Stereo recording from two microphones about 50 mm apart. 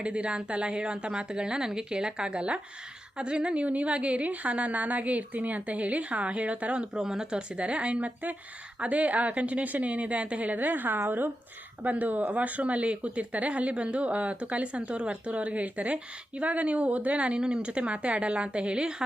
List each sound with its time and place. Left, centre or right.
0.0 s speech: right
6.9 s speech: centre